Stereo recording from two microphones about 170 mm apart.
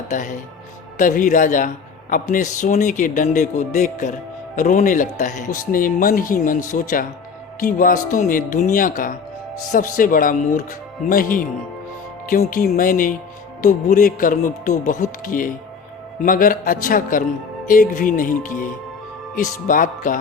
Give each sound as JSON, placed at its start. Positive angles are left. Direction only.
{"t": 0.1, "sound": "speech", "side_deg": 45}